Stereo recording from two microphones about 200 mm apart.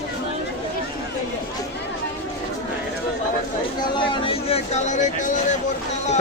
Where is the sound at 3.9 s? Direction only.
25° left (ahead or behind).